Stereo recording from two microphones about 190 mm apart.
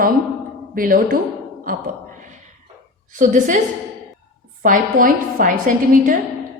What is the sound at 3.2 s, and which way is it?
Speech, 40° right (ahead or behind).